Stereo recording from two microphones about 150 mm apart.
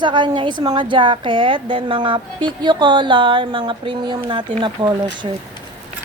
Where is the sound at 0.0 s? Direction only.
30° right (ahead or behind).